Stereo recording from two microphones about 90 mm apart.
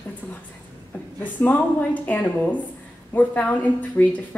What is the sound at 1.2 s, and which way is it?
A woman's voice, 20° left (ahead or behind).